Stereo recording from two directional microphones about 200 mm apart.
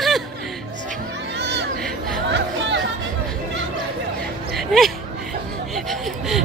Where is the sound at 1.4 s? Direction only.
60° right (ahead or behind).